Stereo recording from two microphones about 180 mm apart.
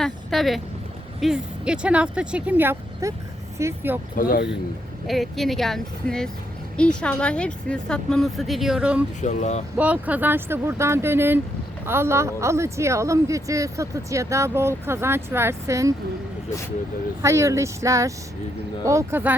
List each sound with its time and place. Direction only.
0.0 s a woman's voice: centre (ahead or behind)
4.1 s speech: 50° left (ahead or behind)
5.0 s a woman's voice: centre (ahead or behind)
9.2 s speech: 40° left (ahead or behind)
9.7 s a woman's voice: 10° right (ahead or behind)
17.2 s a woman's voice: 15° right (ahead or behind)